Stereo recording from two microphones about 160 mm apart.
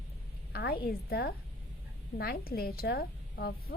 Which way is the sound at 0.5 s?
75° left (ahead or behind).